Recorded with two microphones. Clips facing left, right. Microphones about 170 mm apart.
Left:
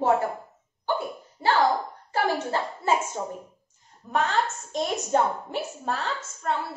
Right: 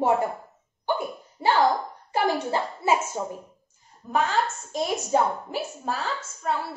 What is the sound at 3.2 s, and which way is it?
A woman's voice, 10° right (ahead or behind).